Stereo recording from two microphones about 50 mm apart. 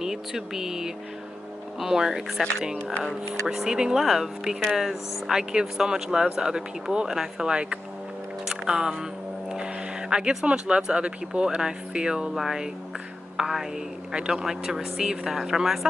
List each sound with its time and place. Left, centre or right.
0.0 s speech: centre
3.4 s speech: centre
8.5 s a sound: centre
9.5 s speech: centre
12.4 s speech: centre
14.1 s a man's voice: centre